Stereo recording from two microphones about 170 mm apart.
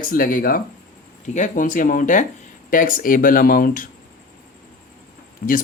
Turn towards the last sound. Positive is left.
turn(degrees=65)  # may be behind; listen again after turning